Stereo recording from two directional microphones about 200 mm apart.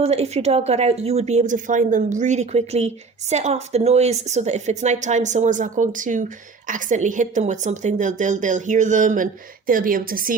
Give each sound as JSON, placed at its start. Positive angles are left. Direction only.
{"t": 0.0, "sound": "speech", "side_deg": -30}